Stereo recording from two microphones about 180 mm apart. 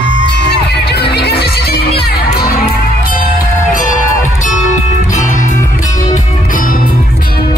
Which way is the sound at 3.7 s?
45° left (ahead or behind).